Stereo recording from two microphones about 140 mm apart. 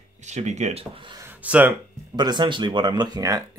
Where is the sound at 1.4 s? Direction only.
10° right (ahead or behind).